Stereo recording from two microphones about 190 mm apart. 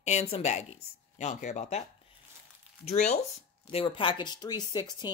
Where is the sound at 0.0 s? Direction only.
35° left (ahead or behind).